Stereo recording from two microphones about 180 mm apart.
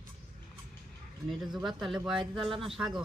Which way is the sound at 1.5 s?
Centre (ahead or behind).